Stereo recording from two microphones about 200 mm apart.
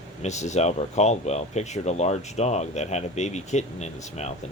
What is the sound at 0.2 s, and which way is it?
Speech, 35° left (ahead or behind).